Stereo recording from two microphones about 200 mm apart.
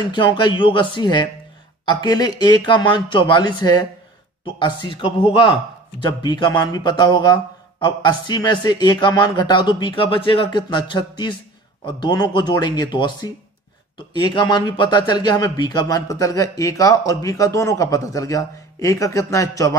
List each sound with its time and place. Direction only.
0.0 s speech: 25° left (ahead or behind)